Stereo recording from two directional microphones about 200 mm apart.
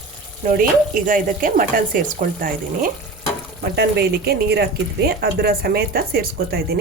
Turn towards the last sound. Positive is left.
turn(degrees=-50)  # may be behind; listen again after turning